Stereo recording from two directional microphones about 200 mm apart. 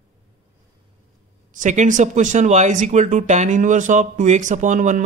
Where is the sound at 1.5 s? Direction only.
40° right (ahead or behind).